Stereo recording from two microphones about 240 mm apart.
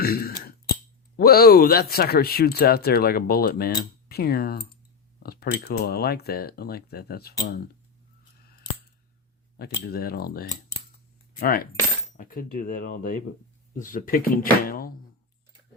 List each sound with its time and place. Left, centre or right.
0.0 s speech: left
9.6 s speech: left